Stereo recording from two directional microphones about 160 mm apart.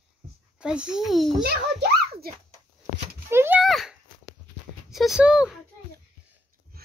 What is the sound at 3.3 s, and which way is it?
Speech, 15° right (ahead or behind).